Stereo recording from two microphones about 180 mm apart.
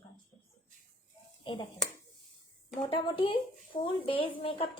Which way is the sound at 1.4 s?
25° left (ahead or behind).